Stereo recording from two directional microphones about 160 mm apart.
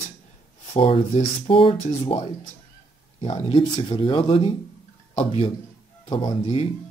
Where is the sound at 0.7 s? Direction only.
35° left (ahead or behind).